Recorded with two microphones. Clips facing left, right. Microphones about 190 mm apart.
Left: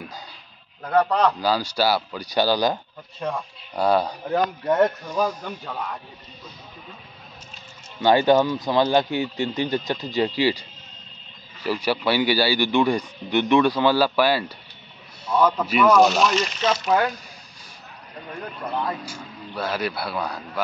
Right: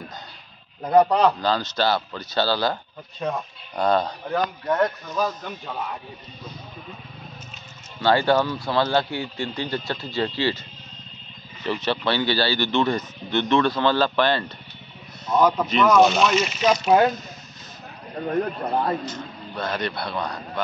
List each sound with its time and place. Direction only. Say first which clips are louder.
0.8 s a man's voice: right 3 dB; 15° right (ahead or behind)
1.4 s speech: left 1 dB; 10° left (ahead or behind)
3.2 s speech: right 1 dB; 5° right (ahead or behind)
3.7 s speech: left 1 dB; 10° left (ahead or behind)
4.3 s speech: left 3 dB; 20° left (ahead or behind)
8.0 s speech: left 2 dB; 15° left (ahead or behind)
11.6 s speech: left 1 dB; 10° left (ahead or behind)
15.6 s speech: left 2 dB; 10° left (ahead or behind)
16.7 s speech: right 4 dB; 25° right (ahead or behind)
18.2 s speech: right 9 dB; 50° right (ahead or behind)
19.0 s speech: right 3 dB; 10° left (ahead or behind)